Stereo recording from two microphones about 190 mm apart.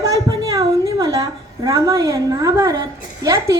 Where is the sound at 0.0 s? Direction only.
15° right (ahead or behind).